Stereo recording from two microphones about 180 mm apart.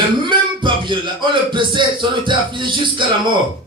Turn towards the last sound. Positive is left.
turn(degrees=-25)  # may be behind; listen again after turning